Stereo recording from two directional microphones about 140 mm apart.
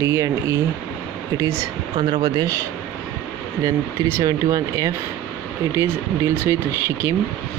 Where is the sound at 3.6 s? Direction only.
25° right (ahead or behind).